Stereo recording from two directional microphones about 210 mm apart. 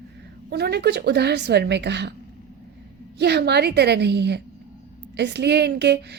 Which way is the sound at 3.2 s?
50° right (ahead or behind).